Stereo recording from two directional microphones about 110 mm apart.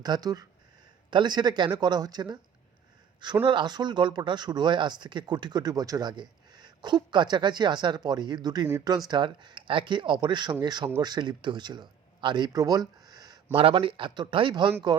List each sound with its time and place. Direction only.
0.0 s speech: 35° right (ahead or behind)
3.4 s speech: 45° right (ahead or behind)
13.5 s speech: 60° right (ahead or behind); by 14.9 s 40° right (ahead or behind)